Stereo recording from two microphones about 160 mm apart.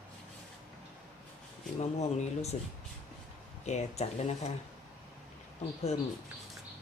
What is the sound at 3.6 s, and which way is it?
Speech, 45° left (ahead or behind).